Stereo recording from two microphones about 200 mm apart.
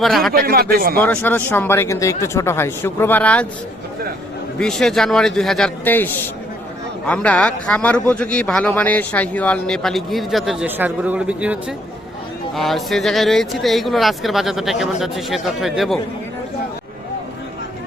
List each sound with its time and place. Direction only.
0.0 s a man's voice: centre (ahead or behind)
0.3 s speech: 50° right (ahead or behind)
0.9 s speech: 10° left (ahead or behind)
4.5 s a man's voice: 5° left (ahead or behind)
7.1 s a man's voice: 5° left (ahead or behind)